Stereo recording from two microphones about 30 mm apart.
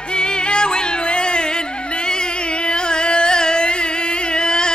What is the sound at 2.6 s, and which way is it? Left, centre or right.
Middle eastern music, left.